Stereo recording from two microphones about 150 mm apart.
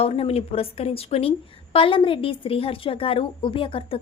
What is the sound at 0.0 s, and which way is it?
A woman's voice, 40° left (ahead or behind).